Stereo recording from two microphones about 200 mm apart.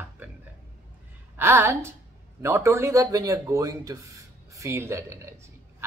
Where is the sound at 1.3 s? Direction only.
10° right (ahead or behind).